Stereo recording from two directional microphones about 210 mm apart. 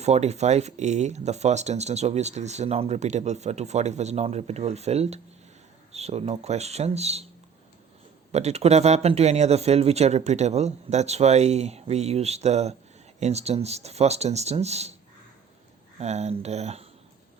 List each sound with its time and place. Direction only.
0.0 s speech: 30° right (ahead or behind)
8.3 s speech: 30° right (ahead or behind)
16.0 s speech: 30° right (ahead or behind)